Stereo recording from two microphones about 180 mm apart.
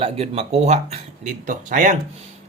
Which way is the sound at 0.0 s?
35° right (ahead or behind).